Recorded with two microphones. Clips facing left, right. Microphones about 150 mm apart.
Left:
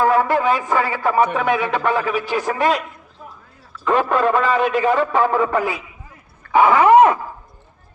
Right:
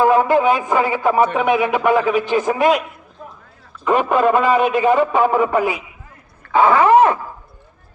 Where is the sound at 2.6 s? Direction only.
Centre (ahead or behind).